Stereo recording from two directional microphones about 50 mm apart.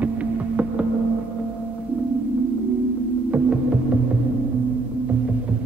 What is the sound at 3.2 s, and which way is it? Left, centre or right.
Throbbing, right.